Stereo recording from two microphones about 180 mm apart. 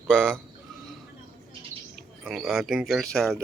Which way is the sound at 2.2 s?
Centre (ahead or behind).